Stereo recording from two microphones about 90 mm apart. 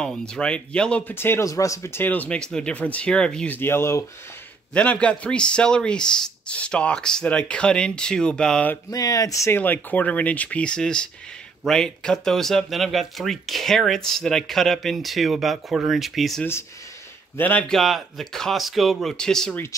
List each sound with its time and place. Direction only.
0.0 s speech: 10° left (ahead or behind)
1.0 s speech: 25° left (ahead or behind); by 3.5 s 10° left (ahead or behind)
3.5 s speech: 25° left (ahead or behind)
4.7 s speech: 15° left (ahead or behind)
8.9 s speech: 45° left (ahead or behind)
9.6 s speech: 20° left (ahead or behind); by 16.4 s centre (ahead or behind)
17.4 s speech: 20° left (ahead or behind)
17.6 s speech: centre (ahead or behind)